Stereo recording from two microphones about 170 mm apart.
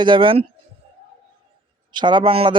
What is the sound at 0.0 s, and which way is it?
Speech, 30° right (ahead or behind).